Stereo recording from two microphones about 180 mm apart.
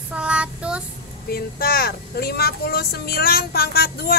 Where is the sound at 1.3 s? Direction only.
55° left (ahead or behind).